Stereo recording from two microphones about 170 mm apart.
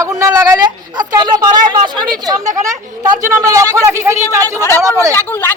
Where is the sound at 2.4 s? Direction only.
45° right (ahead or behind).